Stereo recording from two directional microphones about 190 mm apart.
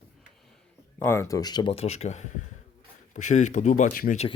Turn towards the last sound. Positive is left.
turn(degrees=45)  # may be behind; listen again after turning